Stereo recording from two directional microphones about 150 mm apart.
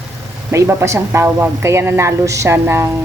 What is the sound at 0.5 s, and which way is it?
Speech, 20° right (ahead or behind).